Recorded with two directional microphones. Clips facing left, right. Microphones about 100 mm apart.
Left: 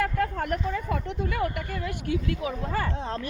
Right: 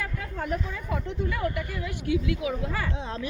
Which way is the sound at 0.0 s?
60° left (ahead or behind).